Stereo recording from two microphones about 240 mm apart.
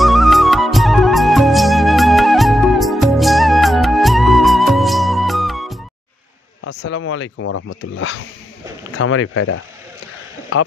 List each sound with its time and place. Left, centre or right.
0.0 s music: centre
6.7 s speech: left